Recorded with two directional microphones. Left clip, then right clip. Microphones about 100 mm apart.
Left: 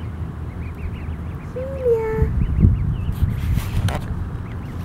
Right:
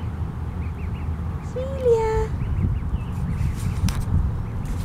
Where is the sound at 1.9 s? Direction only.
5° right (ahead or behind).